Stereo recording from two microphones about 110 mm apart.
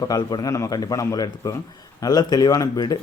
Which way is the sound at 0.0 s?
40° left (ahead or behind).